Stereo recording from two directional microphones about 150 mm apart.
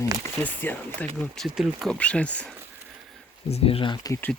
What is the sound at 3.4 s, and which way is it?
Speech, 40° left (ahead or behind).